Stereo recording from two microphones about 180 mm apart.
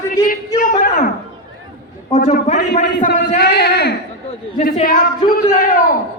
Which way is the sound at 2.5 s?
40° left (ahead or behind).